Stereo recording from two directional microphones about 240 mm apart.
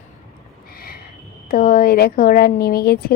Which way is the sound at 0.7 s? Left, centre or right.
Left.